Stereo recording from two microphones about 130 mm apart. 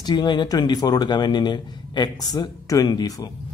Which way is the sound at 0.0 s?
35° left (ahead or behind).